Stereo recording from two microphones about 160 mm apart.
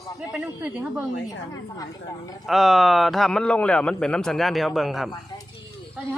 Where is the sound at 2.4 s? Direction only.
Centre (ahead or behind).